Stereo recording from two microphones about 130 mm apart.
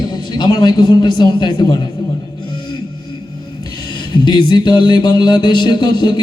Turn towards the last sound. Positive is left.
turn(degrees=35)  # may be behind; listen again after turning